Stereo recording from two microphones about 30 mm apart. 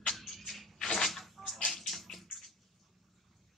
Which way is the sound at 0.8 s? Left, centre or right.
Left.